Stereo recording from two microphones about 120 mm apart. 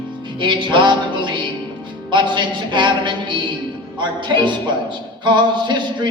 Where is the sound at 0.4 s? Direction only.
40° right (ahead or behind).